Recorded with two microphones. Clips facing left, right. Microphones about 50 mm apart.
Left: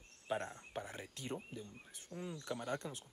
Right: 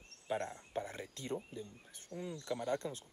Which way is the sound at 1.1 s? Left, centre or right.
Left.